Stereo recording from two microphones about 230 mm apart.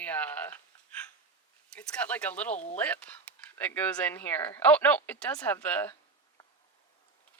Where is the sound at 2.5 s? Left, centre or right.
Left.